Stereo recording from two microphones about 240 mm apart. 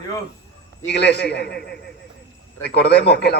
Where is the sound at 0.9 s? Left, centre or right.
Left.